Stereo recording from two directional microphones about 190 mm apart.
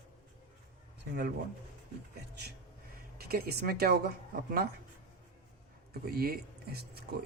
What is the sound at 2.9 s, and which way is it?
Speech, 55° right (ahead or behind).